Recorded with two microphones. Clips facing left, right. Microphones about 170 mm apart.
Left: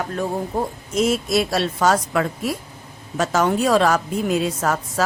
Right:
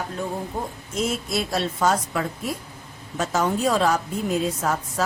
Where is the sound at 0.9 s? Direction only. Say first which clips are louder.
Left 6 dB; 90° left.